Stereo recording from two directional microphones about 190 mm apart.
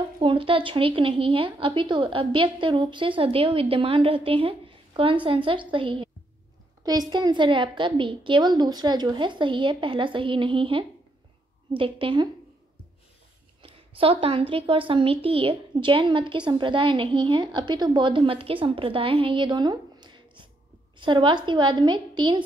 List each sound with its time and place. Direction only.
0.2 s a woman's voice: 30° right (ahead or behind)
13.6 s a woman's voice: 30° right (ahead or behind)